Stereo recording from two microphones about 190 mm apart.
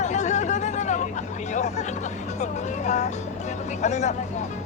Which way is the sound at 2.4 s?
40° left (ahead or behind).